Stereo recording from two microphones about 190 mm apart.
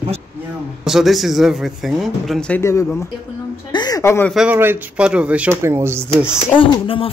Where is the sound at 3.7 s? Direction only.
20° left (ahead or behind).